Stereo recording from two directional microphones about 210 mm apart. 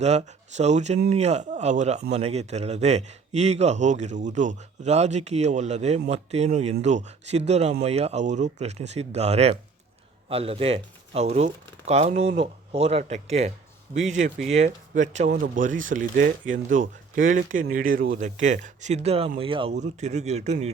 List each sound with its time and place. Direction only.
0.0 s a man's voice: 30° right (ahead or behind)